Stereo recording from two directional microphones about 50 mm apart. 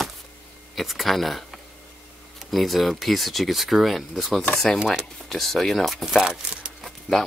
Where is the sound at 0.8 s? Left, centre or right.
Centre.